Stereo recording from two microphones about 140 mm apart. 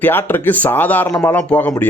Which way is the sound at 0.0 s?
15° left (ahead or behind).